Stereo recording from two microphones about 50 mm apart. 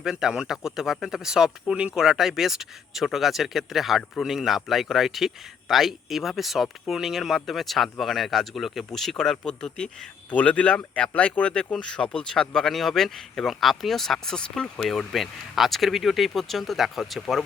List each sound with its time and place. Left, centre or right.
0.0 s speech: centre
10.3 s speech: left
14.8 s speech: centre